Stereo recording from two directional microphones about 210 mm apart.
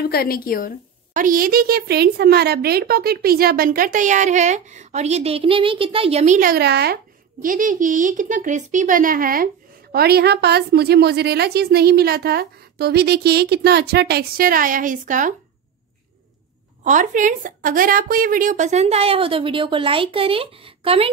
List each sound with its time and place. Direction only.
0.0 s a woman's voice: 45° left (ahead or behind)
1.1 s speech: 40° right (ahead or behind)
7.4 s speech: 40° right (ahead or behind)
16.8 s speech: 35° right (ahead or behind)